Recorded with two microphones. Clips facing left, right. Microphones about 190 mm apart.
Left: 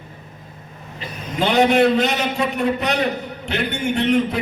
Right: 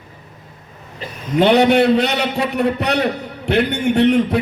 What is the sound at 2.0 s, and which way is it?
Speech, 70° right (ahead or behind).